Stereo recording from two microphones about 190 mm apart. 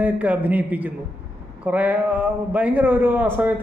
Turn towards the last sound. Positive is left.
turn(degrees=-10)  # may be behind; listen again after turning